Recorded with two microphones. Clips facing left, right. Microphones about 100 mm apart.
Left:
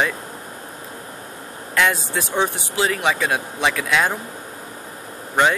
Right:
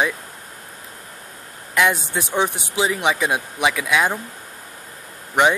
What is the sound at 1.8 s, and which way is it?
Speech, 15° right (ahead or behind).